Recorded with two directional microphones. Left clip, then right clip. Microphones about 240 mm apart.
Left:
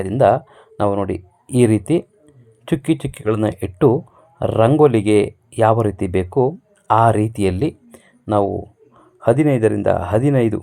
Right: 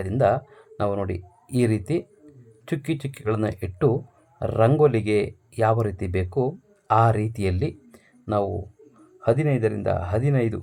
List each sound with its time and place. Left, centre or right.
0.0 s speech: centre